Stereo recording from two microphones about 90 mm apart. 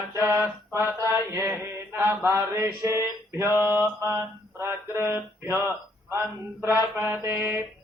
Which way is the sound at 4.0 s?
30° right (ahead or behind).